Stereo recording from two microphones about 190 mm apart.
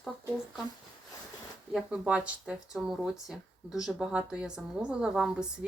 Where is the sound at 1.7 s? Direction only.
5° right (ahead or behind).